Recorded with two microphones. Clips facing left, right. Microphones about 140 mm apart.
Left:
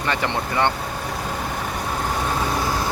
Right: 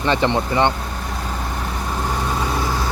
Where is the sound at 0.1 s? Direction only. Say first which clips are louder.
Right 5 dB; 25° right (ahead or behind).